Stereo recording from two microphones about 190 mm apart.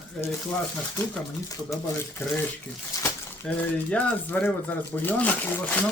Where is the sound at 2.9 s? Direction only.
15° left (ahead or behind).